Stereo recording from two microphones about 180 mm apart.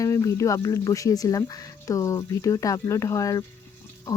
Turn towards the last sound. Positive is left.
turn(degrees=20)  # may be behind; listen again after turning